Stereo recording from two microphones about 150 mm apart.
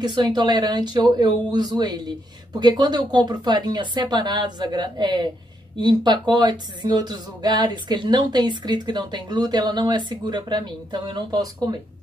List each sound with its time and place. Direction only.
0.0 s speech: 30° right (ahead or behind)